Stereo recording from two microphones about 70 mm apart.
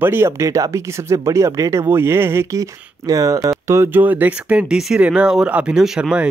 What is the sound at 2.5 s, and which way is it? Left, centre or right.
Speech, right.